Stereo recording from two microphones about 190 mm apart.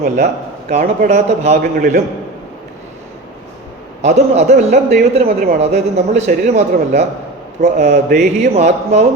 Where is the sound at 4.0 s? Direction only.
35° right (ahead or behind).